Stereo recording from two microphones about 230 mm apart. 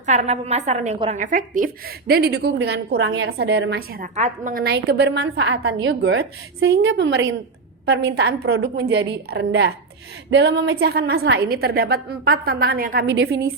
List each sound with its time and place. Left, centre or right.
0.0 s a woman's voice: right
13.1 s a woman's voice: right